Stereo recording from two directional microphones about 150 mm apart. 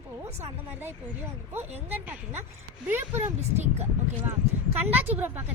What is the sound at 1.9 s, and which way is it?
Speech, 10° right (ahead or behind).